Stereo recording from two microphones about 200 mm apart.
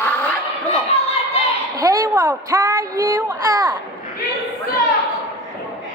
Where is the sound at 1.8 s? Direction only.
15° right (ahead or behind).